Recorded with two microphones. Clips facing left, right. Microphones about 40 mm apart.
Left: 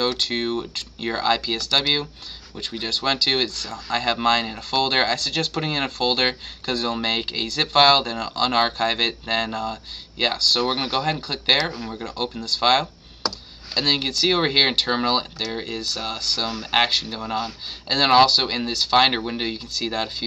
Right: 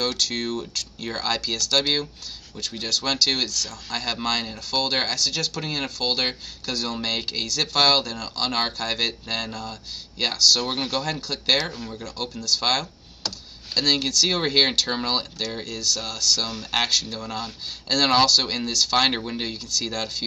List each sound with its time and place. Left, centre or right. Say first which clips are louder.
0.0 s speech: left 3 dB; left